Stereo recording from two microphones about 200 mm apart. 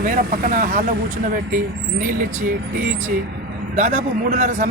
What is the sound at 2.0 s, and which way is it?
Speech, 40° right (ahead or behind).